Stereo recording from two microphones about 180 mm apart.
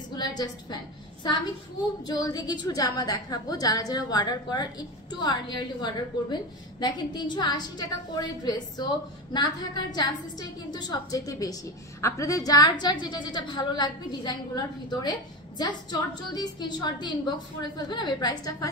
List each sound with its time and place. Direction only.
0.1 s a woman's voice: 25° left (ahead or behind)
2.1 s a woman's voice: 20° left (ahead or behind)